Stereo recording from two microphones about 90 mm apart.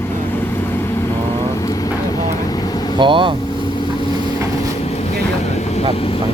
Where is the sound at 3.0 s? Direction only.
65° right (ahead or behind).